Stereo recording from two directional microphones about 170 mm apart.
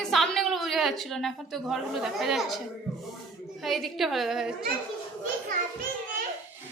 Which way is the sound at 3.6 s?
Centre (ahead or behind).